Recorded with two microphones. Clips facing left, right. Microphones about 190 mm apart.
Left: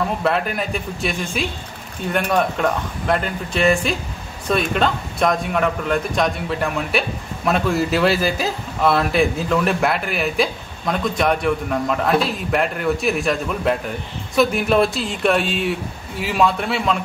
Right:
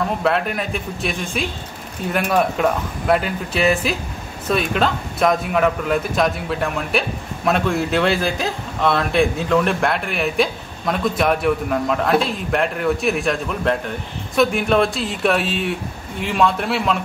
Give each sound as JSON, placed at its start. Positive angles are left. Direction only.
{"t": 0.2, "sound": "a man's voice", "side_deg": 0}